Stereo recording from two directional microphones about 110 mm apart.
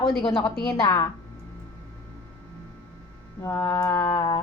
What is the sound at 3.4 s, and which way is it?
Mantra, 25° left (ahead or behind).